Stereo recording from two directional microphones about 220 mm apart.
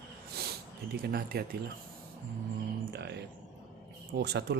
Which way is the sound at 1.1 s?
45° right (ahead or behind).